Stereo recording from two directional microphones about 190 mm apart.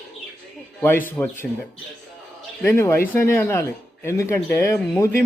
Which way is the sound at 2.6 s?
10° left (ahead or behind).